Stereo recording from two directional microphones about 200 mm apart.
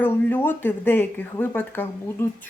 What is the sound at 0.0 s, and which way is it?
Speech, 10° left (ahead or behind).